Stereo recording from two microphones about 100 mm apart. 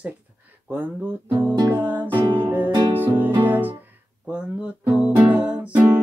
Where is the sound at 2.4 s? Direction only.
20° right (ahead or behind).